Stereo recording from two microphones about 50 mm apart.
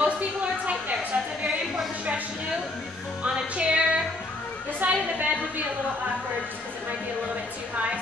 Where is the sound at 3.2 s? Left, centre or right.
Right.